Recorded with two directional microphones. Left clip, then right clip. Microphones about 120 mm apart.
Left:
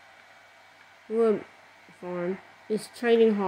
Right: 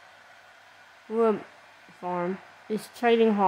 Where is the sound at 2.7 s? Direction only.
25° right (ahead or behind).